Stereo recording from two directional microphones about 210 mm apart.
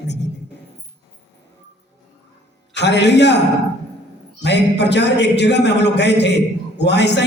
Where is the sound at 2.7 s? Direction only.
55° left (ahead or behind).